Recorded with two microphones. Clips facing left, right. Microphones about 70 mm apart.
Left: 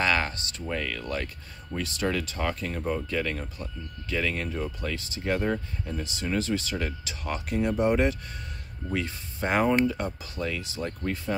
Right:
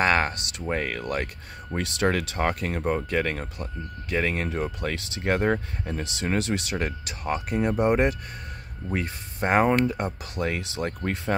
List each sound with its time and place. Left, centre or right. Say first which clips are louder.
0.0 s a sound: right 4 dB; right
0.7 s speech: right 4 dB; right
2.3 s speech: right 4 dB; right
6.1 s speech: right 1 dB; right
6.8 s speech: right 3 dB; right
10.8 s speech: right 4 dB; right